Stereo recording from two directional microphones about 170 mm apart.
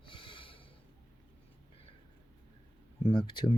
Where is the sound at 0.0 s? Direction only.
30° left (ahead or behind).